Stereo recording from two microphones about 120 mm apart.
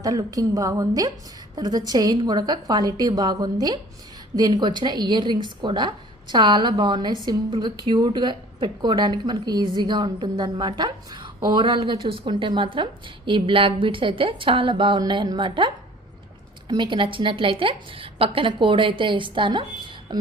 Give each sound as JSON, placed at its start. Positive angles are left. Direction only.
{"t": 0.0, "sound": "a woman's voice", "side_deg": -30}